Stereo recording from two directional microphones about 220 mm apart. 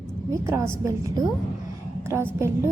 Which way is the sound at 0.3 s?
10° right (ahead or behind).